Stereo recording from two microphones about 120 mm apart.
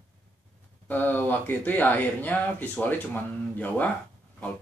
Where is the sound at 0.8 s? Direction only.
15° left (ahead or behind).